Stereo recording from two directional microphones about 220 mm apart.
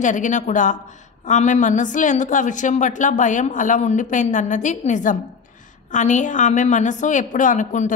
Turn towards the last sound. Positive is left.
turn(degrees=35)  # may be behind; listen again after turning